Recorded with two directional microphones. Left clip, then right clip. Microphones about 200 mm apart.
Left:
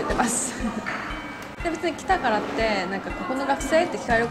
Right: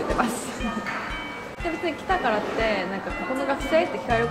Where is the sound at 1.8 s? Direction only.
25° left (ahead or behind).